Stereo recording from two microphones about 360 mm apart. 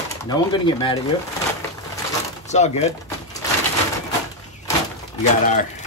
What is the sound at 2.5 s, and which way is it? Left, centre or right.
Speech, centre.